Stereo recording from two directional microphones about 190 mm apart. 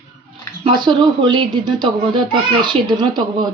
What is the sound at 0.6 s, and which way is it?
A child's voice, 25° right (ahead or behind).